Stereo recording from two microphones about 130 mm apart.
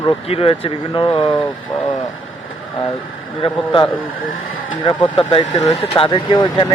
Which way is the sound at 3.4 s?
40° left (ahead or behind).